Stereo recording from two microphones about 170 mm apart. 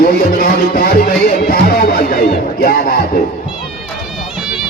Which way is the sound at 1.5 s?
60° left (ahead or behind).